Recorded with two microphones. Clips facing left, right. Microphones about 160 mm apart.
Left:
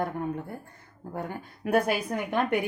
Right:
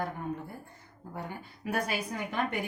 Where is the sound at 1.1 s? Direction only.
55° left (ahead or behind).